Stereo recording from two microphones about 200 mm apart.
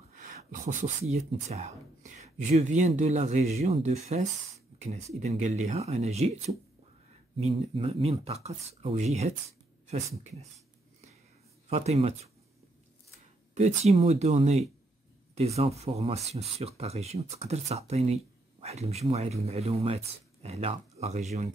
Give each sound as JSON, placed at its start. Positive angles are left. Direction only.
{"t": 0.1, "sound": "speech", "side_deg": -40}
{"t": 11.7, "sound": "speech", "side_deg": -30}
{"t": 13.6, "sound": "speech", "side_deg": -35}